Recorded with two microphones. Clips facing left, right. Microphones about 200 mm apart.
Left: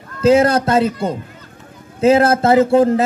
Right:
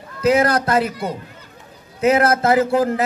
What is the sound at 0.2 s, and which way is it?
Speech, 30° left (ahead or behind).